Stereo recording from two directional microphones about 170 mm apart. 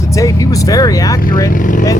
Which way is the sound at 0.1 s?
20° left (ahead or behind).